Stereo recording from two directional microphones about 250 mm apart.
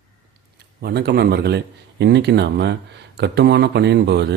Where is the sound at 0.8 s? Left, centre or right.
Right.